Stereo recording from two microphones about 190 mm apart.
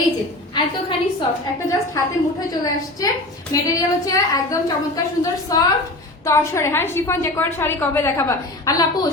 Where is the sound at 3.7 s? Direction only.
20° left (ahead or behind).